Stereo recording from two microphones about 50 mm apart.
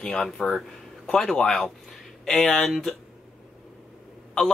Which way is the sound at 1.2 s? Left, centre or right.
Centre.